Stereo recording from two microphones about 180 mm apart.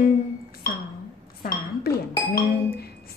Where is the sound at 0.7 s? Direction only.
55° left (ahead or behind).